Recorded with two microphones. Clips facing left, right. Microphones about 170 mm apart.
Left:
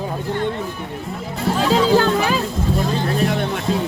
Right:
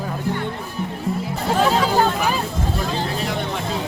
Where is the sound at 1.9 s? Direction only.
90° left.